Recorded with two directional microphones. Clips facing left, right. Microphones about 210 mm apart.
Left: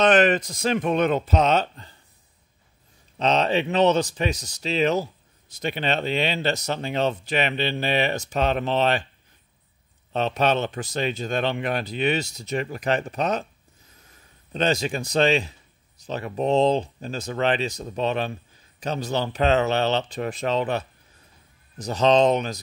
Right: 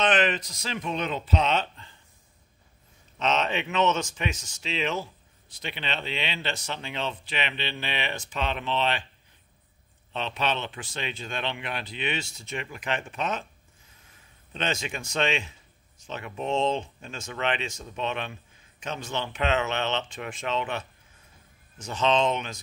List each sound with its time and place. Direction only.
0.0 s speech: 45° left (ahead or behind)
3.2 s speech: 35° left (ahead or behind)
10.1 s speech: 45° left (ahead or behind)
14.5 s speech: 35° left (ahead or behind)